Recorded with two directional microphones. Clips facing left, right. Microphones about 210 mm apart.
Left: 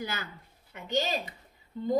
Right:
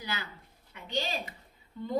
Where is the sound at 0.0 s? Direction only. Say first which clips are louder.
Left 3 dB; 50° left (ahead or behind).